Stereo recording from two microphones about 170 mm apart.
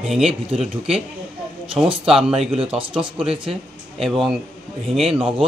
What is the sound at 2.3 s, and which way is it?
Speech, 35° right (ahead or behind).